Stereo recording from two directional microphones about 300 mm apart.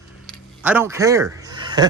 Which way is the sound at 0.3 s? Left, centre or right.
Centre.